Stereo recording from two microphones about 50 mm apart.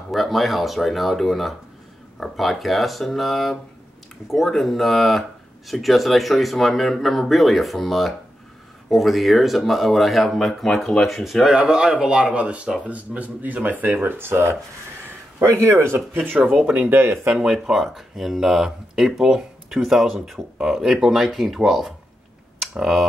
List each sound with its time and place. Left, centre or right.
0.1 s speech: centre
11.4 s speech: centre; by 17.0 s right
17.0 s speech: right
17.5 s speech: centre
22.6 s a sound: centre